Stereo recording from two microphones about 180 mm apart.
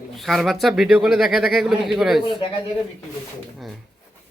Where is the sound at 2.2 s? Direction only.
30° left (ahead or behind).